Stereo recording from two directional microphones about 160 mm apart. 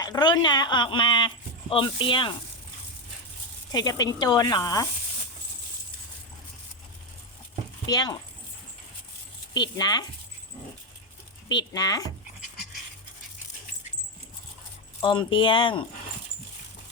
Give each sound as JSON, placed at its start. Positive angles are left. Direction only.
{"t": 0.0, "sound": "speech", "side_deg": 25}
{"t": 3.7, "sound": "speech", "side_deg": 25}
{"t": 7.9, "sound": "speech", "side_deg": 25}
{"t": 9.6, "sound": "speech", "side_deg": 25}
{"t": 11.4, "sound": "speech", "side_deg": 25}
{"t": 15.0, "sound": "speech", "side_deg": 30}